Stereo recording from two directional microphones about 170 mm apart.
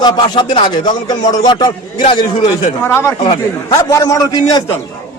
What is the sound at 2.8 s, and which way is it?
Speech, 15° left (ahead or behind).